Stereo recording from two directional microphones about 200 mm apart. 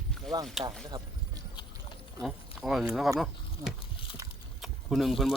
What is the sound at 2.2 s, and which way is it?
Speech, centre (ahead or behind).